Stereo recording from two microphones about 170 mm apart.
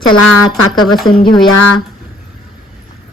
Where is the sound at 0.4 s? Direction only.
25° left (ahead or behind).